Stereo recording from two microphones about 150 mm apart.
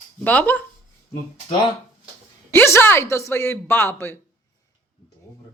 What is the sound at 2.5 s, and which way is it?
Speech, 15° left (ahead or behind).